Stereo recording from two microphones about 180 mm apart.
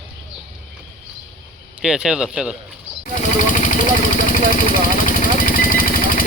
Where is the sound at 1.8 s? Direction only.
5° right (ahead or behind).